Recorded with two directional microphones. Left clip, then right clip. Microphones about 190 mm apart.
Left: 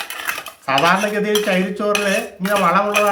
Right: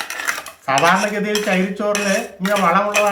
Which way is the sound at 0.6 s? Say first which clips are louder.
Even; 15° left (ahead or behind).